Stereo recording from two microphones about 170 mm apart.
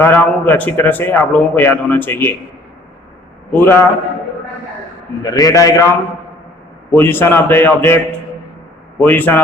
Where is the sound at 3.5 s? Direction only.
15° left (ahead or behind).